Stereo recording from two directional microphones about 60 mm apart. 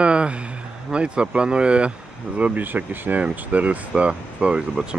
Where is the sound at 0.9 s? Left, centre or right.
Centre.